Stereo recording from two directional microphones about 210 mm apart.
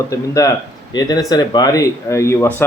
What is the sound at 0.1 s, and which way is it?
Speech, 15° left (ahead or behind).